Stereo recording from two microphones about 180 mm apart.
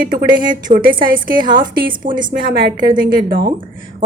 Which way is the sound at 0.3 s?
50° right (ahead or behind).